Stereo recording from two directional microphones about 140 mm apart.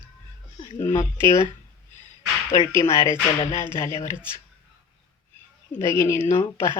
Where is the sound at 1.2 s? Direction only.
20° left (ahead or behind).